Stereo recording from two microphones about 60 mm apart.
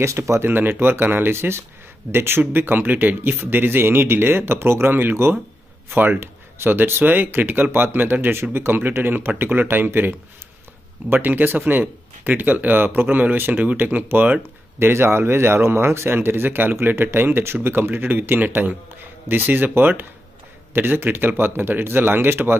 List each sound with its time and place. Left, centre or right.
0.0 s speech: right
14.8 s speech: right